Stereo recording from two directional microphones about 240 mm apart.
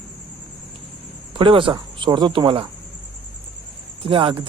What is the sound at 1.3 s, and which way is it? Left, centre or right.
Speech, right.